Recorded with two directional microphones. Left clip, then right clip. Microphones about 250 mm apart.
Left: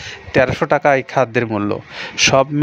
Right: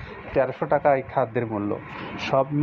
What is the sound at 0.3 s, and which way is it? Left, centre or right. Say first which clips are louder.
Speech: left 7 dB; left.